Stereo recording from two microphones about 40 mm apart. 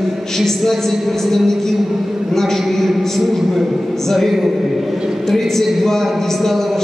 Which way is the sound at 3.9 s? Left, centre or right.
Centre.